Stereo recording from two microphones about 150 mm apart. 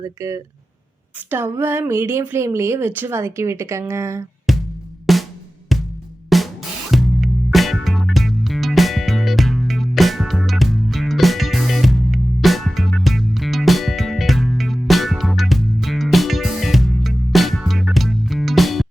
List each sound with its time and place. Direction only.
0.0 s speech: 20° right (ahead or behind)
4.5 s music: centre (ahead or behind)
6.3 s drum: centre (ahead or behind)
6.9 s music: centre (ahead or behind)